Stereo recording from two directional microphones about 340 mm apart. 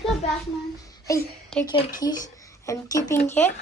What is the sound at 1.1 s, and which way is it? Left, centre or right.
Speech, centre.